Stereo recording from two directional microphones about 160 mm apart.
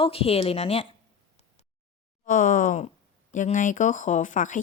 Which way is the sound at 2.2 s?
55° left (ahead or behind).